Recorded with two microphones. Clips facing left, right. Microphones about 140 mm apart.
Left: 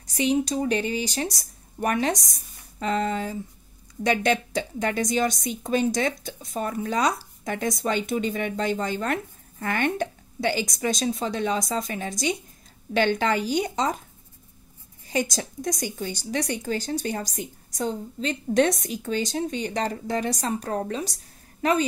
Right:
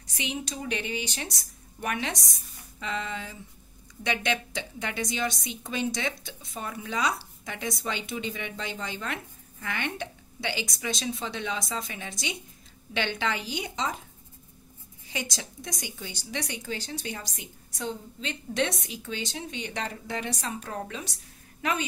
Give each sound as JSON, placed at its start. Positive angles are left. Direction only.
{"t": 0.0, "sound": "a woman's voice", "side_deg": 40}
{"t": 15.0, "sound": "a woman's voice", "side_deg": 45}